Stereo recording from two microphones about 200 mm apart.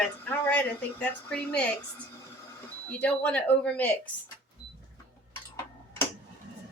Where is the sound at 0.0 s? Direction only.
5° left (ahead or behind).